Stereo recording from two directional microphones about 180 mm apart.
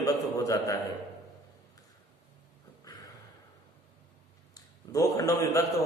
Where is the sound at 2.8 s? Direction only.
20° left (ahead or behind).